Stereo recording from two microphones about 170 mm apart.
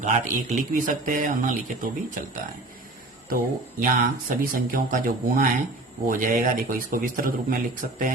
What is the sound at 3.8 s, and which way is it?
A man's voice, 55° right (ahead or behind).